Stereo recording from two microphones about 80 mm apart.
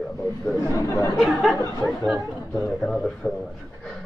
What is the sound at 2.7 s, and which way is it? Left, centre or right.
Speech, centre.